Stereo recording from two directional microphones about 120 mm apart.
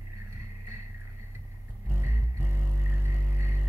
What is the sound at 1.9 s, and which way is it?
Music, 15° right (ahead or behind).